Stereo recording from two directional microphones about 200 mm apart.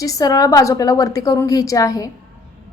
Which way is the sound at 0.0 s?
15° left (ahead or behind).